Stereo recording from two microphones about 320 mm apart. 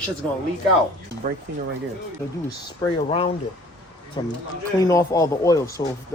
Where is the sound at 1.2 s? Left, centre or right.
Right.